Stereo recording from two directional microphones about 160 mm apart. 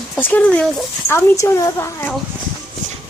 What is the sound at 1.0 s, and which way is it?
Speech, 15° left (ahead or behind).